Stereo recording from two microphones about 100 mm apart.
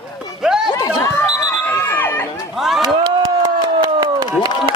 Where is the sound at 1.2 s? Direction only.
20° left (ahead or behind).